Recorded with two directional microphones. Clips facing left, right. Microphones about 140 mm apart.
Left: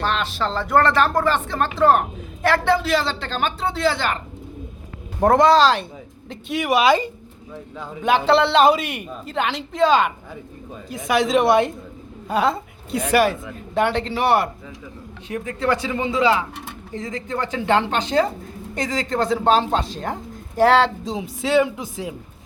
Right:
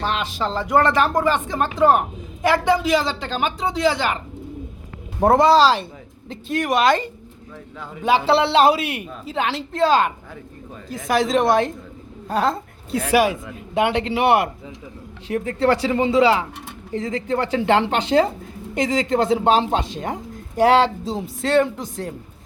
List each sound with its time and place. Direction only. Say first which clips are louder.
0.3 s speech: even; 15° right (ahead or behind)
5.2 s a woman's voice: even; 5° right (ahead or behind)
8.0 s a woman's voice: even; 5° right (ahead or behind)
15.3 s a woman's voice: right 3 dB; 35° right (ahead or behind); by 22.1 s 5° left (ahead or behind)